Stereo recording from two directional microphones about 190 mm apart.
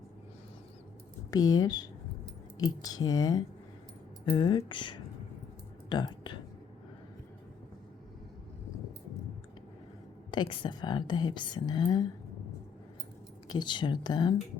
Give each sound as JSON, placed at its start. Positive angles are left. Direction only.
{"t": 1.3, "sound": "speech", "side_deg": 20}
{"t": 2.8, "sound": "speech", "side_deg": 20}
{"t": 10.3, "sound": "speech", "side_deg": 25}
{"t": 13.5, "sound": "speech", "side_deg": 25}